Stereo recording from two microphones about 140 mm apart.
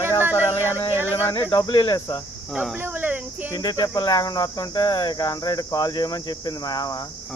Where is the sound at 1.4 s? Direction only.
35° left (ahead or behind).